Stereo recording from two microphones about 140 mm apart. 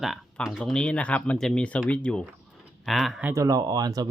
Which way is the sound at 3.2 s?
25° right (ahead or behind).